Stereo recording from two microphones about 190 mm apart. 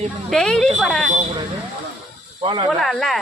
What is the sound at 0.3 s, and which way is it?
Speech, 5° left (ahead or behind).